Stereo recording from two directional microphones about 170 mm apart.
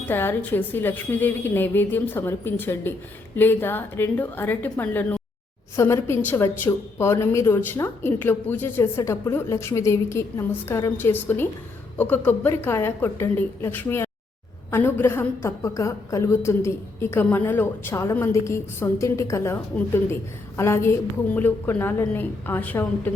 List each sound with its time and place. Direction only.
0.1 s a woman's voice: 10° left (ahead or behind)